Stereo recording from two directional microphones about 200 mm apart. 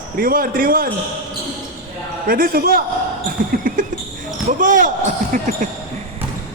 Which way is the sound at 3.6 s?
45° right (ahead or behind).